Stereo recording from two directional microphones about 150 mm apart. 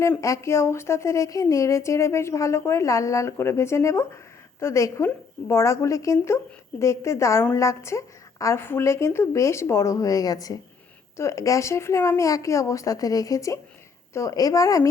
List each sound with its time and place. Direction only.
0.2 s speech: 20° left (ahead or behind)